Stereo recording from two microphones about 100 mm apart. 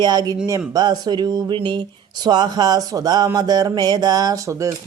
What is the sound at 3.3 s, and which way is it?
Speech, 40° right (ahead or behind).